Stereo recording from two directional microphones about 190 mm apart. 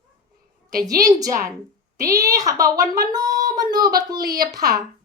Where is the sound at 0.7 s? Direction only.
20° right (ahead or behind).